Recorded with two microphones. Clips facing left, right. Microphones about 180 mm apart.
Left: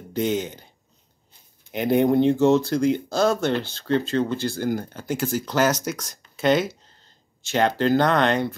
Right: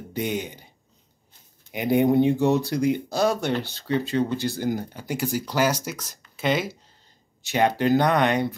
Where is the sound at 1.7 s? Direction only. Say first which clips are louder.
Left 1 dB; 10° right (ahead or behind).